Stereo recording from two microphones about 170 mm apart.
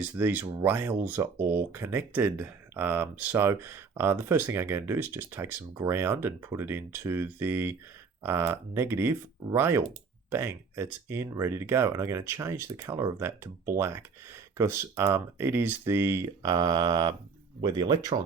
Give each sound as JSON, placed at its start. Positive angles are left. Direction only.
{"t": 0.0, "sound": "speech", "side_deg": -10}